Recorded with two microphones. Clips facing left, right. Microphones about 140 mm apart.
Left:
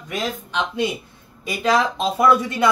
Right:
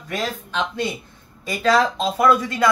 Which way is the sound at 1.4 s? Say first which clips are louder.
Right 1 dB; 15° left (ahead or behind).